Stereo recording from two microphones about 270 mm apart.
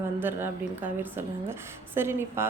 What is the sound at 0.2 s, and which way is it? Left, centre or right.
A woman's voice, centre.